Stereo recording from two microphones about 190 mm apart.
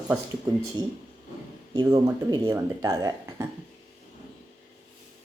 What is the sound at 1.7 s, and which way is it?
Speech, 20° right (ahead or behind).